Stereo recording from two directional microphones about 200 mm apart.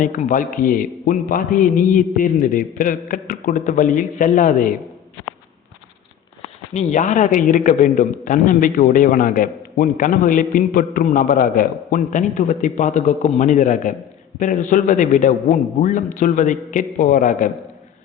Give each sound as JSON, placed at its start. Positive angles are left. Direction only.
{"t": 0.0, "sound": "a man's voice", "side_deg": 40}
{"t": 6.7, "sound": "a man's voice", "side_deg": 35}